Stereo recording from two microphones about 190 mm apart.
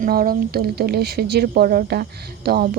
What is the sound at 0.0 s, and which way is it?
Speech, 50° right (ahead or behind).